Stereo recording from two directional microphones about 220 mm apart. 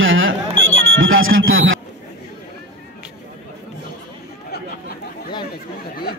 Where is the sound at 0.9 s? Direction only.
65° right (ahead or behind).